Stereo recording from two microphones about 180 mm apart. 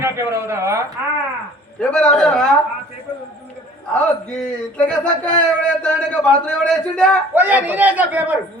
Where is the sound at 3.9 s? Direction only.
5° left (ahead or behind).